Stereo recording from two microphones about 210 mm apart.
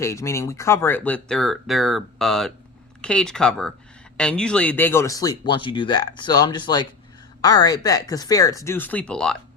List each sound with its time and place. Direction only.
0.0 s speech: 15° left (ahead or behind)